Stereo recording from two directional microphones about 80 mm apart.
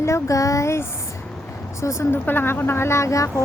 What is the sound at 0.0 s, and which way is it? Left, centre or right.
Speech, left.